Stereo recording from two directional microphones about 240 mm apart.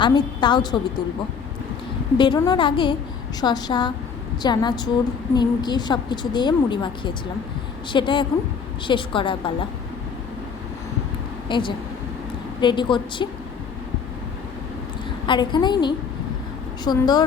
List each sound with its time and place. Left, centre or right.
0.0 s a woman's voice: centre
2.1 s a woman's voice: centre
11.4 s speech: centre
15.3 s a woman's voice: centre